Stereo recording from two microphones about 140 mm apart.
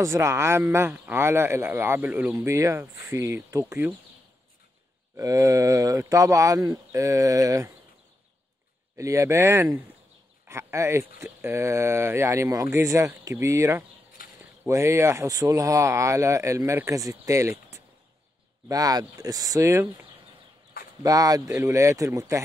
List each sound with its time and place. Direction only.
0.0 s speech: 20° right (ahead or behind)
5.1 s speech: 25° right (ahead or behind)
8.9 s speech: 20° right (ahead or behind)